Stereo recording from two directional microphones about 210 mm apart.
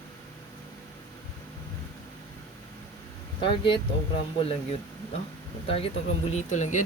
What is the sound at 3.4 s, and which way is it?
Speech, 25° left (ahead or behind).